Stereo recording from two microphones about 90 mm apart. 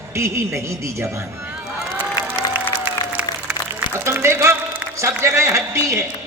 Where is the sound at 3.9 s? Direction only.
25° right (ahead or behind).